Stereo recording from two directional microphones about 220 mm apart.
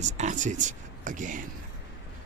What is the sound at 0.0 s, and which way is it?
Speech, 35° right (ahead or behind).